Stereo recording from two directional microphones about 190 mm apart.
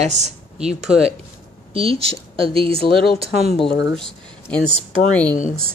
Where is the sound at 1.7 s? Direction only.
30° right (ahead or behind).